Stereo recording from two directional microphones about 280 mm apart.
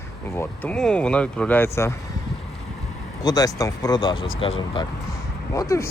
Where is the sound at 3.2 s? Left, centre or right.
Centre.